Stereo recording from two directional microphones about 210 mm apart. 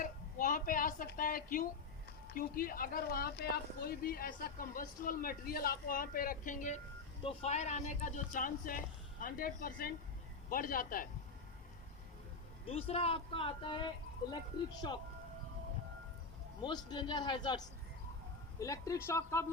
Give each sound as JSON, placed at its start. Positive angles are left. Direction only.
{"t": 0.0, "sound": "a woman's voice", "side_deg": 40}
{"t": 12.6, "sound": "speech", "side_deg": 30}
{"t": 16.6, "sound": "speech", "side_deg": 20}
{"t": 18.6, "sound": "speech", "side_deg": 15}